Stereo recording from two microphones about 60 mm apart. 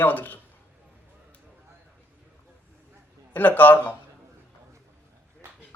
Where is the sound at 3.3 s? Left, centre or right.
Left.